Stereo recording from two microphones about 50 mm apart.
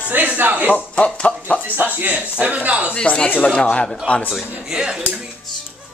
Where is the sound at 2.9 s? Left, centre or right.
Left.